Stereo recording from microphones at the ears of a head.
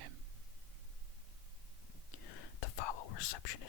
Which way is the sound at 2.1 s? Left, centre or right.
Left.